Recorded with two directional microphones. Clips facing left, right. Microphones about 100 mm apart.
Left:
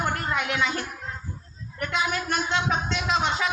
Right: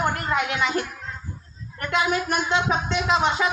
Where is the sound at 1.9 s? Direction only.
15° right (ahead or behind).